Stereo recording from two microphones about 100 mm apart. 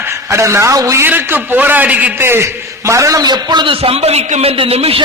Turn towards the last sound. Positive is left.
turn(degrees=-75)  # may be behind; listen again after turning